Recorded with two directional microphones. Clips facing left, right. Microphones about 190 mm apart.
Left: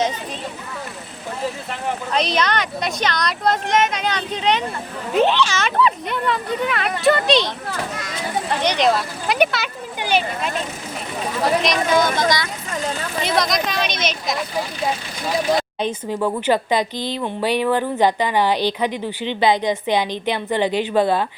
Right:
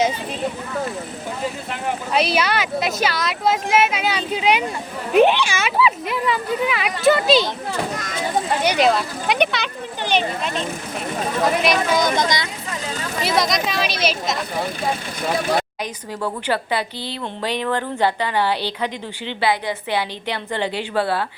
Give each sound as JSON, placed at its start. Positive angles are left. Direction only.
{"t": 2.1, "sound": "speech", "side_deg": -5}
{"t": 8.6, "sound": "speech", "side_deg": -5}
{"t": 11.6, "sound": "speech", "side_deg": -10}
{"t": 13.2, "sound": "speech", "side_deg": 0}
{"t": 16.2, "sound": "speech", "side_deg": 15}